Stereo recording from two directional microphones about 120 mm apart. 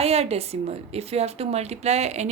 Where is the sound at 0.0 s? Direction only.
60° right (ahead or behind).